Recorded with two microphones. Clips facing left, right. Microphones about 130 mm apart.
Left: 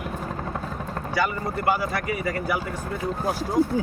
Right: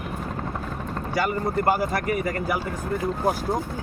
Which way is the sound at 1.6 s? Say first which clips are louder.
Left 1 dB; 45° right (ahead or behind).